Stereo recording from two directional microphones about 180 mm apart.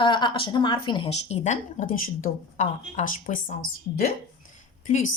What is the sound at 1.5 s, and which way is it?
Speech, 40° left (ahead or behind).